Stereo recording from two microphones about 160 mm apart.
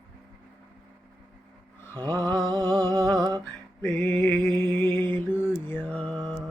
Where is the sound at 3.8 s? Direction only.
5° left (ahead or behind).